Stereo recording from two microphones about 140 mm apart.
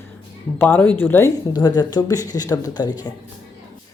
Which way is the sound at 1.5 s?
30° left (ahead or behind).